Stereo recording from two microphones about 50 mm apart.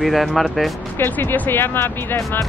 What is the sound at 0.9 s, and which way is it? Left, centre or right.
Speech, left.